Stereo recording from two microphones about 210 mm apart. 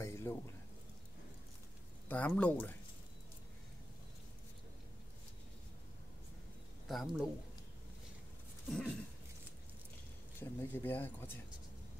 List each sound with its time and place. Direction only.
0.0 s a sound: 10° left (ahead or behind)
2.0 s speech: 5° left (ahead or behind)
6.9 s a man's voice: centre (ahead or behind)
8.6 s dog: centre (ahead or behind)
10.4 s speech: 10° left (ahead or behind)